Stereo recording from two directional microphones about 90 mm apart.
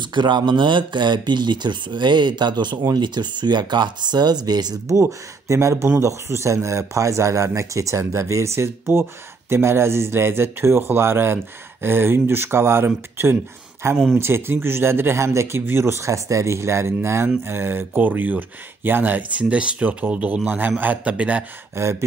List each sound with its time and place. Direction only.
0.0 s speech: 60° right (ahead or behind)
4.9 s speech: 35° right (ahead or behind); by 21.5 s 15° right (ahead or behind)